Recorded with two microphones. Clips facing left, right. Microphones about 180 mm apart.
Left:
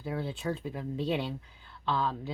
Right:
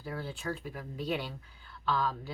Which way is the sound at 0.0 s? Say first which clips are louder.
Left 4 dB; 20° left (ahead or behind).